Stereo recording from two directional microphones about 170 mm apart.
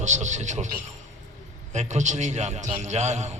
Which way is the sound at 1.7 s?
45° right (ahead or behind).